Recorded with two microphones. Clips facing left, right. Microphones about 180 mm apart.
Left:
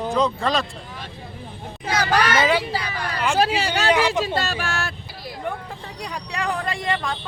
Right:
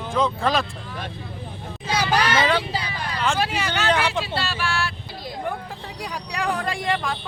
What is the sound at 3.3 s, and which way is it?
Speech, 40° left (ahead or behind).